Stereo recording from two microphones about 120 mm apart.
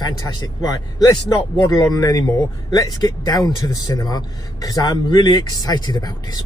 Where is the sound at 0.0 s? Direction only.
30° left (ahead or behind).